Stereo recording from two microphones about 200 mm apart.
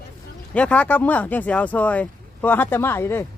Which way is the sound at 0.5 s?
5° left (ahead or behind).